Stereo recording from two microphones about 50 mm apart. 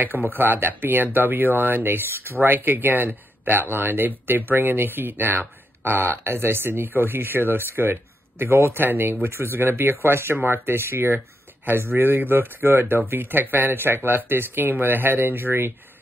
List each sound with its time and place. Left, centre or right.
0.0 s speech: right